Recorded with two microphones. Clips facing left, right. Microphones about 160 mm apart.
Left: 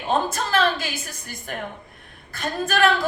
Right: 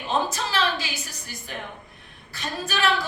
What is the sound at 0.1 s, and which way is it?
A woman's voice, 50° left (ahead or behind).